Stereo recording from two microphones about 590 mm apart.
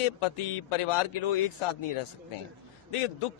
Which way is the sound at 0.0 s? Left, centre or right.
Left.